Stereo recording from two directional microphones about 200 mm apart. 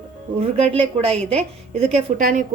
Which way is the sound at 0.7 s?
30° right (ahead or behind).